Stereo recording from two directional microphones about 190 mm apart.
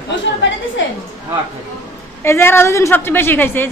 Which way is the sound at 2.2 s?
15° left (ahead or behind).